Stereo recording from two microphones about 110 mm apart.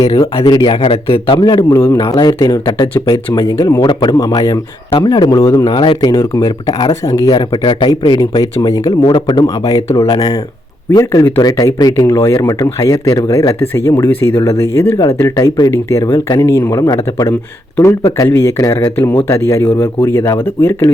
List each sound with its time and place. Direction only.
0.0 s speech: 40° left (ahead or behind); by 1.4 s 55° left (ahead or behind)
1.4 s speech: 35° left (ahead or behind)
5.7 s speech: 45° left (ahead or behind); by 11.3 s 25° left (ahead or behind)
11.3 s speech: 35° left (ahead or behind)
18.9 s speech: 20° left (ahead or behind)